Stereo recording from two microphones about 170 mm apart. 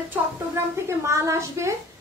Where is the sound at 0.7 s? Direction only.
15° right (ahead or behind).